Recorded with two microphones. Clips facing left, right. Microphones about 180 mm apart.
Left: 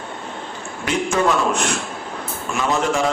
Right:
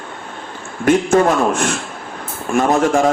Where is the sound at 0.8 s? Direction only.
50° right (ahead or behind).